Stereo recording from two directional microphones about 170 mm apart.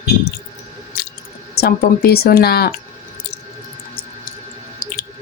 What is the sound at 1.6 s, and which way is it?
Speech, 65° left (ahead or behind).